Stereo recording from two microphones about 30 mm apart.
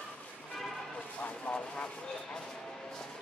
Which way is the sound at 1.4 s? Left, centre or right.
Left.